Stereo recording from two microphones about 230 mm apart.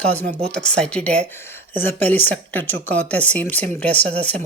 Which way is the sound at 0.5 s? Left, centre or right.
Centre.